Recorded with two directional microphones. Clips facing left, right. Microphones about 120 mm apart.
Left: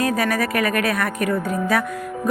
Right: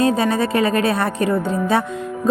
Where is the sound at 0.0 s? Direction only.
25° right (ahead or behind).